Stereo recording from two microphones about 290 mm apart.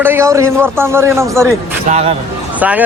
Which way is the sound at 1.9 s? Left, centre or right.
Right.